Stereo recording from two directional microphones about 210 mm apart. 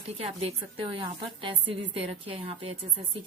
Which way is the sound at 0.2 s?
25° right (ahead or behind).